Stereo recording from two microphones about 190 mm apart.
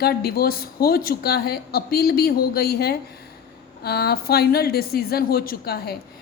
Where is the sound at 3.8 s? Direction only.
55° left (ahead or behind).